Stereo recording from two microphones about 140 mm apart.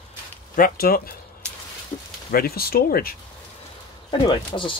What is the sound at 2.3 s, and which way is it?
Speech, 90° left.